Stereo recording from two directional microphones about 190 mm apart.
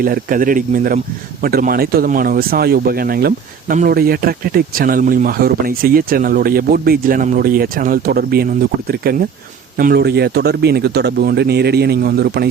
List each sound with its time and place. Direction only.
0.0 s speech: 45° right (ahead or behind)